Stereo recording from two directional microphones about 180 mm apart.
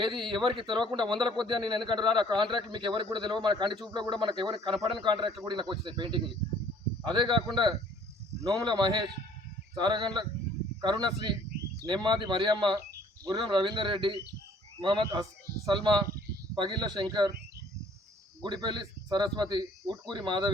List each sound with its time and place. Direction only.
0.0 s a man's voice: 25° right (ahead or behind)
18.4 s a man's voice: 25° right (ahead or behind)